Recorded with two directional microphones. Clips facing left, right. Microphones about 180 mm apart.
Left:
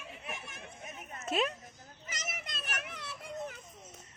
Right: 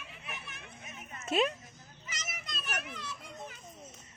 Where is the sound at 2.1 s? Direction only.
55° left (ahead or behind).